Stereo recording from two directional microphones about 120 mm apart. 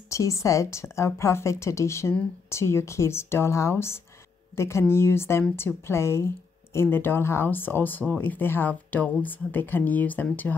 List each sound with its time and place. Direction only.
0.1 s speech: 25° left (ahead or behind)